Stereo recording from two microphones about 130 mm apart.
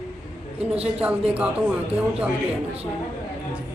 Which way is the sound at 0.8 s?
10° right (ahead or behind).